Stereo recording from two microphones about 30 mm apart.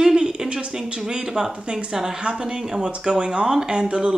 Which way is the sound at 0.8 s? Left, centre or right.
Right.